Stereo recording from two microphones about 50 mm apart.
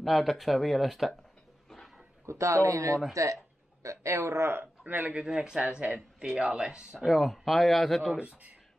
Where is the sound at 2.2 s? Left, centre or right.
Right.